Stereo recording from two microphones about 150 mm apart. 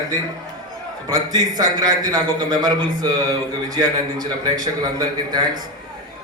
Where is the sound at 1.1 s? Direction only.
25° right (ahead or behind).